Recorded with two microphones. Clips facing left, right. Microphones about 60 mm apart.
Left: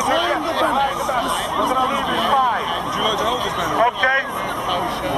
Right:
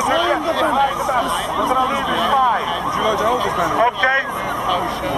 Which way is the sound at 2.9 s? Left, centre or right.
Right.